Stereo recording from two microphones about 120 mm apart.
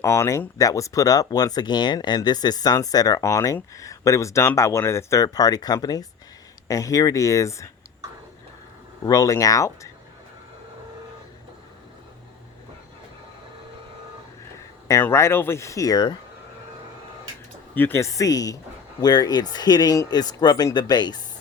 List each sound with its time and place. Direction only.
0.0 s speech: 25° left (ahead or behind)
9.0 s speech: 30° left (ahead or behind)
15.0 s speech: 20° left (ahead or behind)
17.7 s speech: 20° left (ahead or behind); by 21.2 s 35° left (ahead or behind)